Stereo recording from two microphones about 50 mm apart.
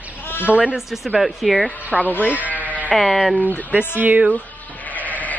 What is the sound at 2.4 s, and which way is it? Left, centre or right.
Sheep, left.